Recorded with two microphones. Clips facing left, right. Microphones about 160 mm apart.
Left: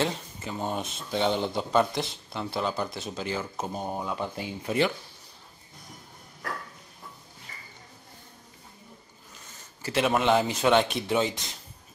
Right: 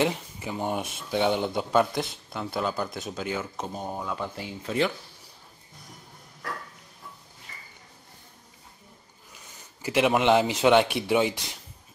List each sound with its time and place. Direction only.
0.0 s speech: 15° right (ahead or behind)
3.7 s speech: 15° left (ahead or behind)
9.3 s speech: 15° right (ahead or behind)